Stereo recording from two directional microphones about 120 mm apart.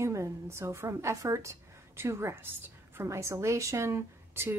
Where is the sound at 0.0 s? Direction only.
25° right (ahead or behind).